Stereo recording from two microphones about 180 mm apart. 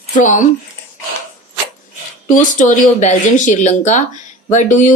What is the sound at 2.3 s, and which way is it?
Speech, 45° left (ahead or behind).